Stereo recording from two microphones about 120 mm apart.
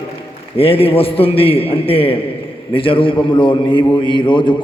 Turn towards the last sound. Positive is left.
turn(degrees=40)  # may be behind; listen again after turning